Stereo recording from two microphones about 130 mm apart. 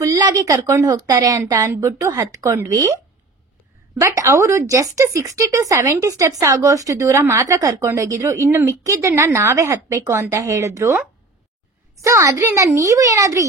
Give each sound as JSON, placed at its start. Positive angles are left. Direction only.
{"t": 0.4, "sound": "speech", "side_deg": -25}
{"t": 4.0, "sound": "speech", "side_deg": -25}